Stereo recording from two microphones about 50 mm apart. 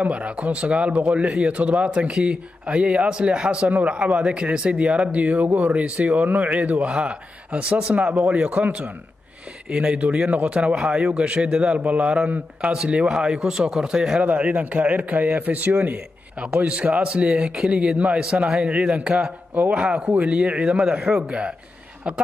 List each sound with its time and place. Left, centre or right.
0.0 s speech: right
3.6 s speech: right
3.9 s speech: right
6.9 s speech: centre
9.7 s speech: right
11.8 s speech: right; by 14.2 s centre
14.2 s speech: right
16.4 s speech: right